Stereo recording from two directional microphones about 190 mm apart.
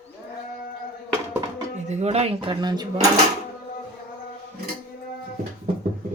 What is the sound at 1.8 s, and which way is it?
Speech, 35° right (ahead or behind).